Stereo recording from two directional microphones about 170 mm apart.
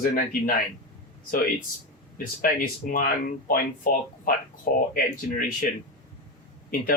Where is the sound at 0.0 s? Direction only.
55° left (ahead or behind).